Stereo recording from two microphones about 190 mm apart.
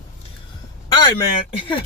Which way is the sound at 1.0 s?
25° left (ahead or behind).